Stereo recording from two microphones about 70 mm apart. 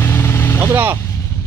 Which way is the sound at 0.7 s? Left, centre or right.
Right.